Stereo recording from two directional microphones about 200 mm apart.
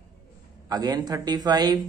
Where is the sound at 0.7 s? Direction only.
20° right (ahead or behind).